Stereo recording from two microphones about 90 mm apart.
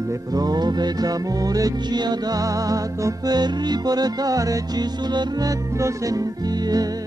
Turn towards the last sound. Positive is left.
turn(degrees=-45)  # may be behind; listen again after turning